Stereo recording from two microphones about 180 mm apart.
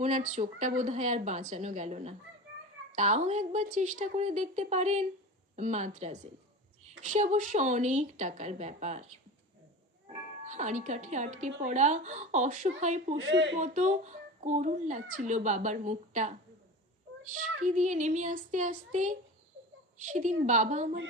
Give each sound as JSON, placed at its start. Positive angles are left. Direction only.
{"t": 0.0, "sound": "a child's voice", "side_deg": -40}
{"t": 10.1, "sound": "a child's voice", "side_deg": -40}
{"t": 13.1, "sound": "speech", "side_deg": -80}
{"t": 13.6, "sound": "a child's voice", "side_deg": -45}
{"t": 17.2, "sound": "a sound", "side_deg": -45}